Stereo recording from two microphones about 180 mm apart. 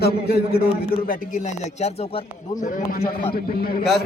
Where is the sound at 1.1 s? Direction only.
45° left (ahead or behind).